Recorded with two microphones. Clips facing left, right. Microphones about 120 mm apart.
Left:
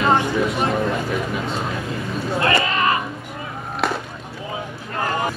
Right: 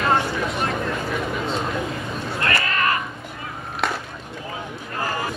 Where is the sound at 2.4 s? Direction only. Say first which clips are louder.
Left 3 dB; 20° left (ahead or behind).